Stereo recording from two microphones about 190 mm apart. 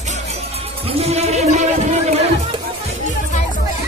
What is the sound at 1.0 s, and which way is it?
Music, 35° right (ahead or behind).